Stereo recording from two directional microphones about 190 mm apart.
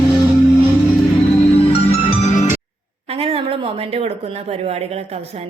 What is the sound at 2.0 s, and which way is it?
Music, 35° left (ahead or behind).